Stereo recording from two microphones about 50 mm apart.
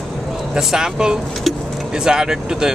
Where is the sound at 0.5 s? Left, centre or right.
Centre.